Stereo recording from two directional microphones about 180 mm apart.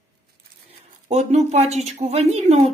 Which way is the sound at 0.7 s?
40° right (ahead or behind).